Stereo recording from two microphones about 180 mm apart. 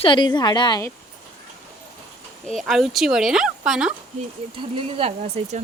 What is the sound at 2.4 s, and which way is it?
Speech, centre (ahead or behind).